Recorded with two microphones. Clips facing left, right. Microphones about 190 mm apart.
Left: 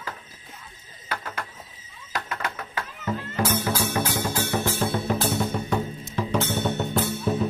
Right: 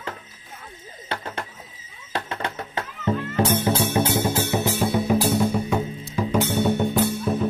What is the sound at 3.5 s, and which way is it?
Music, 25° right (ahead or behind).